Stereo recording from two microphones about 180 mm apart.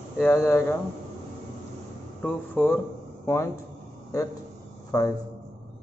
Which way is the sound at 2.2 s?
10° left (ahead or behind).